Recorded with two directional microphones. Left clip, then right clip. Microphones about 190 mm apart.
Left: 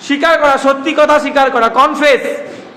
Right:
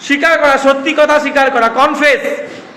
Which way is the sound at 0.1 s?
15° left (ahead or behind).